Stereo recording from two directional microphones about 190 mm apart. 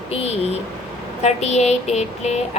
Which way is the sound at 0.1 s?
35° left (ahead or behind).